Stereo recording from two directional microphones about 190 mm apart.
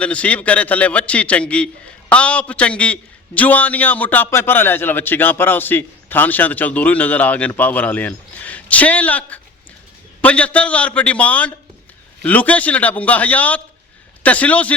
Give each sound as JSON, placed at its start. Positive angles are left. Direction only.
{"t": 0.0, "sound": "a man's voice", "side_deg": 5}